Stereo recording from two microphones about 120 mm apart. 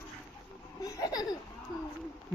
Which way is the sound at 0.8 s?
30° left (ahead or behind).